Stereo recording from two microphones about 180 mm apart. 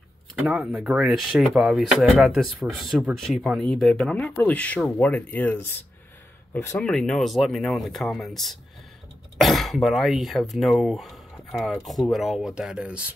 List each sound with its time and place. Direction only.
0.4 s speech: 5° right (ahead or behind); by 6.8 s 15° left (ahead or behind)
6.8 s speech: 5° left (ahead or behind)